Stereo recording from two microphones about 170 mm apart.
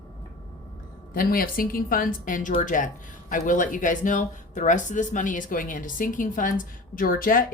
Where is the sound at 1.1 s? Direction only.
60° left (ahead or behind).